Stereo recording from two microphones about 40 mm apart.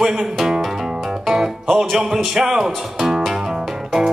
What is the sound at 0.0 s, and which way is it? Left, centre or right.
Speech, centre.